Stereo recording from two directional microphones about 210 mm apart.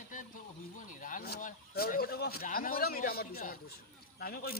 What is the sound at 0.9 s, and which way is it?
A man's voice, 40° left (ahead or behind).